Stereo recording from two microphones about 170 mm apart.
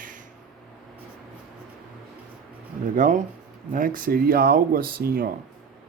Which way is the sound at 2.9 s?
50° right (ahead or behind).